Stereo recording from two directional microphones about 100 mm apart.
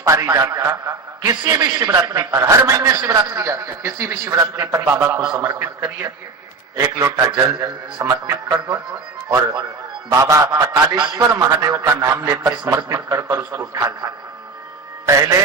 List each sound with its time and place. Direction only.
0.0 s a man's voice: 30° right (ahead or behind)
3.4 s a man's voice: 30° right (ahead or behind)
10.1 s a man's voice: 30° right (ahead or behind)
10.6 s a man's voice: 40° right (ahead or behind)